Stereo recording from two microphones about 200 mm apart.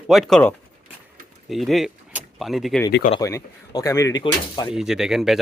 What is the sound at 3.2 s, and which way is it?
Speech, 15° left (ahead or behind).